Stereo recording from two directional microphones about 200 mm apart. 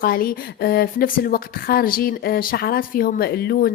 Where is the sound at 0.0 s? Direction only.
45° left (ahead or behind).